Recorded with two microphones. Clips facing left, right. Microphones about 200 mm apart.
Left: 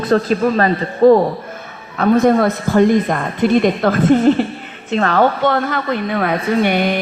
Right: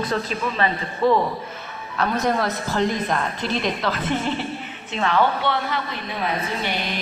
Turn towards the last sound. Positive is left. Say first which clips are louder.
# left 12 dB
turn(degrees=60)  # may be behind; listen again after turning